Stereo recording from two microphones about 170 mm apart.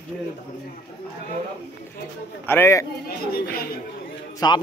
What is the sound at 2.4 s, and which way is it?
Speech, 15° left (ahead or behind).